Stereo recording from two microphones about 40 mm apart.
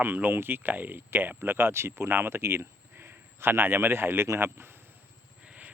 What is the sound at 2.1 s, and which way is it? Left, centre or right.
Speech, right.